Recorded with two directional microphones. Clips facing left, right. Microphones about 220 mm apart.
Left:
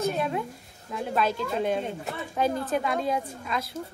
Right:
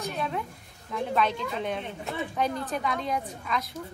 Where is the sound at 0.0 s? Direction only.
5° left (ahead or behind).